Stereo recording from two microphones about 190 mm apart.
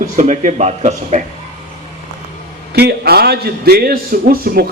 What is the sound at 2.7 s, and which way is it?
A man's voice, 60° right (ahead or behind).